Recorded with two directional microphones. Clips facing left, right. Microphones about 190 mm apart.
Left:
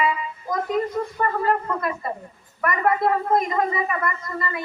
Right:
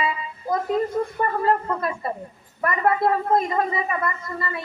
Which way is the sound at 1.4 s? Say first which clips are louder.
Right 1 dB; 30° right (ahead or behind).